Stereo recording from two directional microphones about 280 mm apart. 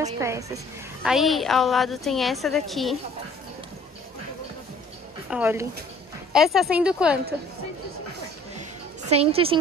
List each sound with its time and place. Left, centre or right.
0.0 s a woman's voice: centre
5.3 s a woman's voice: centre
9.1 s a woman's voice: right